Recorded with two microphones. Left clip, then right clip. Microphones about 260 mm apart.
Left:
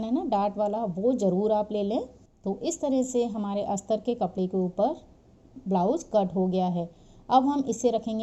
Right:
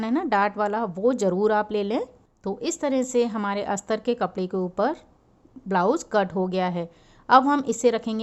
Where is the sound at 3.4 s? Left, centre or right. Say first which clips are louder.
Right 3 dB; right.